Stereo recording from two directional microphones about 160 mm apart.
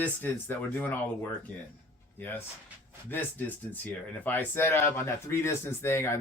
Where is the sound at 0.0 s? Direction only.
15° left (ahead or behind).